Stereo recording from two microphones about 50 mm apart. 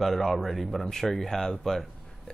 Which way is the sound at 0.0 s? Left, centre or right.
Centre.